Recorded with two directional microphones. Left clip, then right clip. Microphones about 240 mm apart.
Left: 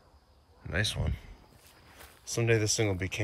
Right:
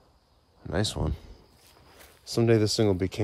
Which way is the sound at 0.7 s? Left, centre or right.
Centre.